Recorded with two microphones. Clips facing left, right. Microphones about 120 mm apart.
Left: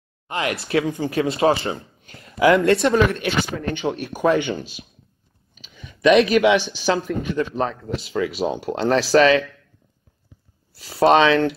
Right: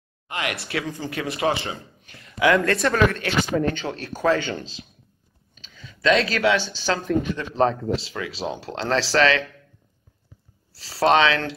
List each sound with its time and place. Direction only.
0.3 s a man's voice: 30° left (ahead or behind)
3.2 s speech: 15° left (ahead or behind)
7.4 s a man's voice: 25° left (ahead or behind)
8.1 s speech: 15° left (ahead or behind)
10.8 s a man's voice: 20° left (ahead or behind)